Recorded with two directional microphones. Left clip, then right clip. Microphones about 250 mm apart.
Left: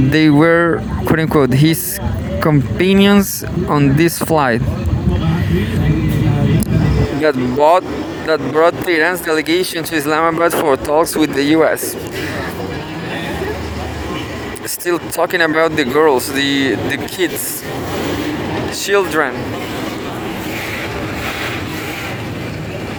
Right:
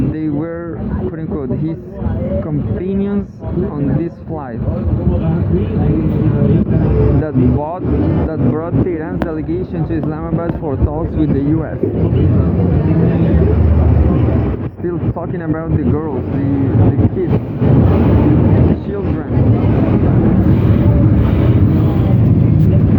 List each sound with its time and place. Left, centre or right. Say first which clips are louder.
0.1 s speech: left 10 dB; left
7.3 s speech: left 7 dB; left
14.8 s speech: left 6 dB; left